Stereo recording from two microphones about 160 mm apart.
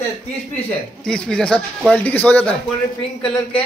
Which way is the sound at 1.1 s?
5° left (ahead or behind).